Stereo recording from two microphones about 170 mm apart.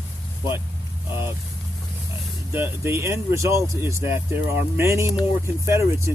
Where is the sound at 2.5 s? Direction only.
15° right (ahead or behind).